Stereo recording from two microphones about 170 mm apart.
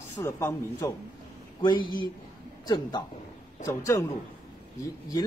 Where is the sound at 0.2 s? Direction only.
15° left (ahead or behind).